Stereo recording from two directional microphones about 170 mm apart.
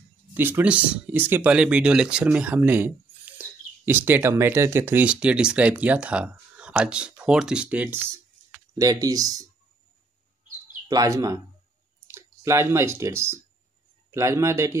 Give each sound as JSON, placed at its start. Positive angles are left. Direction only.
{"t": 0.3, "sound": "speech", "side_deg": -10}
{"t": 8.7, "sound": "speech", "side_deg": -20}
{"t": 10.9, "sound": "speech", "side_deg": -20}